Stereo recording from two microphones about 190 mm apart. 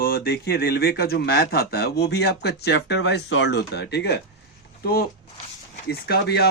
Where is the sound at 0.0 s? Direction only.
55° left (ahead or behind).